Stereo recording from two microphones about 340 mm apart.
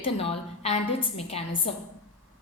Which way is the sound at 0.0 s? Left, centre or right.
Centre.